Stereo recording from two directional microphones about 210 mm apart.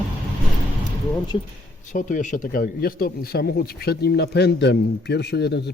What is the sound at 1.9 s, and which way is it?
A man's voice, 40° left (ahead or behind).